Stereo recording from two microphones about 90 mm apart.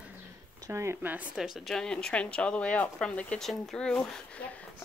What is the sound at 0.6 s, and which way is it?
Speech, 30° right (ahead or behind).